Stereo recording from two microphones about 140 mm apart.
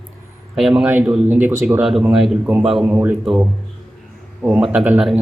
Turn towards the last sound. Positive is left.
turn(degrees=-5)  # may be behind; listen again after turning